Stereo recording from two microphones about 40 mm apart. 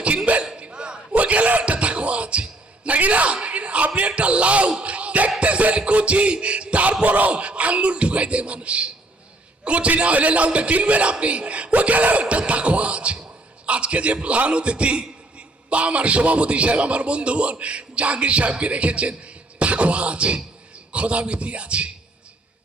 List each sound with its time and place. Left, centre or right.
0.5 s hiccup: right
1.1 s a sound: right
3.4 s bellow: right
3.8 s a man's voice: right
4.8 s music: right
5.4 s a man's voice: right